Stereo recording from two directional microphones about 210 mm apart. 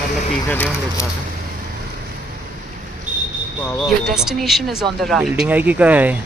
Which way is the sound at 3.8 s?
Centre (ahead or behind).